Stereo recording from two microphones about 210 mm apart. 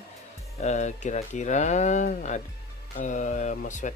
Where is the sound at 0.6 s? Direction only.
35° left (ahead or behind).